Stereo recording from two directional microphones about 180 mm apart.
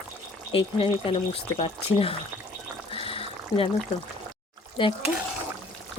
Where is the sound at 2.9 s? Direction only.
30° left (ahead or behind).